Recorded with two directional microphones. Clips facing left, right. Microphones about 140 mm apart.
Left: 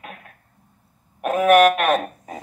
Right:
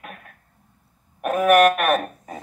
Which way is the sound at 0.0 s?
15° left (ahead or behind).